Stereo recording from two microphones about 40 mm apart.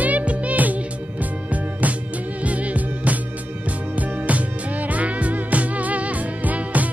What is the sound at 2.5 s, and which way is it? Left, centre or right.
Music, right.